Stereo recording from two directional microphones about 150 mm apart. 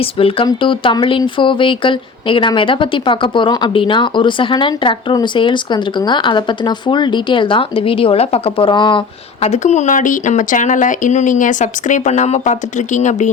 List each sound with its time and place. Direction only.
0.0 s speech: 40° left (ahead or behind)
9.4 s speech: 50° left (ahead or behind)